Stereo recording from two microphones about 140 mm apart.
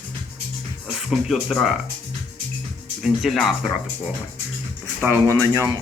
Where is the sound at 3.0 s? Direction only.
Centre (ahead or behind).